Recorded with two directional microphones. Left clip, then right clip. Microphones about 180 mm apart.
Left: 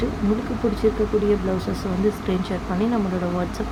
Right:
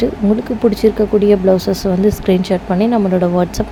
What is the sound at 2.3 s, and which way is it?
Speech, 40° right (ahead or behind).